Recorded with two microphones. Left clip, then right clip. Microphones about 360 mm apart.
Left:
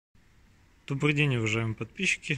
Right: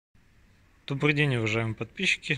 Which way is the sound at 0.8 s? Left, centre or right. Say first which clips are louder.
Right 2 dB; centre.